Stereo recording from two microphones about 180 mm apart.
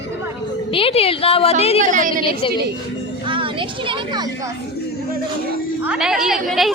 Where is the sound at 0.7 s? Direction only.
30° left (ahead or behind).